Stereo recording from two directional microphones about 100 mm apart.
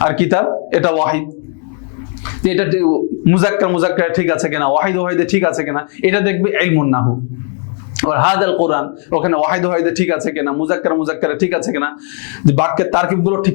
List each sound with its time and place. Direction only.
0.0 s a man's voice: 20° left (ahead or behind)
2.5 s a man's voice: 15° left (ahead or behind)